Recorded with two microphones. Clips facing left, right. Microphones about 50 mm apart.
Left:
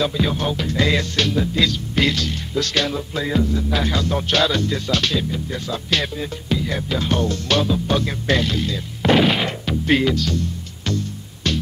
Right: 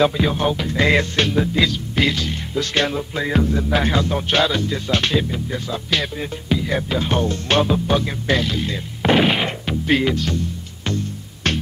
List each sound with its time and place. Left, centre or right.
0.2 s speech: centre
3.3 s music: right
3.9 s speech: right
4.9 s speech: right
5.5 s speech: centre; by 7.8 s right
7.9 s speech: centre
9.1 s a sound: centre
10.1 s speech: right
11.4 s music: right